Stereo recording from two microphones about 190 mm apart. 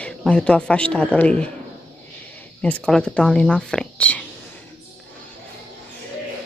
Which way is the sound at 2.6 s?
5° left (ahead or behind).